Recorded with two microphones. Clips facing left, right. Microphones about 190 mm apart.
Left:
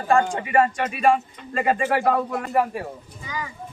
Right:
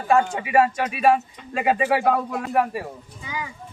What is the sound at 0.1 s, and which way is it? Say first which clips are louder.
Speech: right 1 dB; 5° right (ahead or behind).